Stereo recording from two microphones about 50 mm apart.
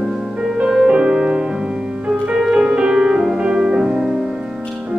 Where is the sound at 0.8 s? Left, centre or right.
Right.